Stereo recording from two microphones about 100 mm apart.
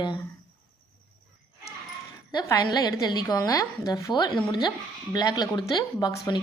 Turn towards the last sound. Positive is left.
turn(degrees=45)  # may be behind; listen again after turning